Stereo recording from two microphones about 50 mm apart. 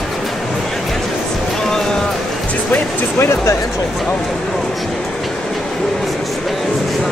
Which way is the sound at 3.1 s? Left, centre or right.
Left.